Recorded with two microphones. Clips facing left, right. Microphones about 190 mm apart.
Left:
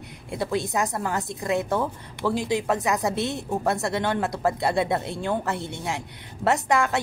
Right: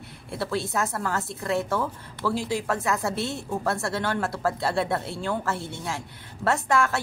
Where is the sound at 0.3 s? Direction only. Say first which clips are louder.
Left 2 dB; 15° left (ahead or behind).